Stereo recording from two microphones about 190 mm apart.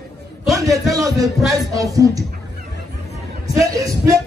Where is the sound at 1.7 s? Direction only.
20° right (ahead or behind).